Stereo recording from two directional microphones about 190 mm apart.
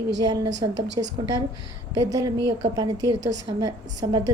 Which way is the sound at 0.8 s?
70° right (ahead or behind).